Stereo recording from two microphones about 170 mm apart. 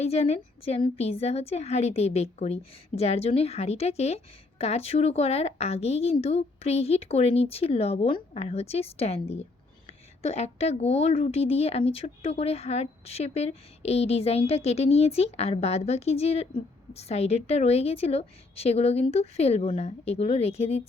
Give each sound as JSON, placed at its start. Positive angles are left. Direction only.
{"t": 0.0, "sound": "a woman's voice", "side_deg": 35}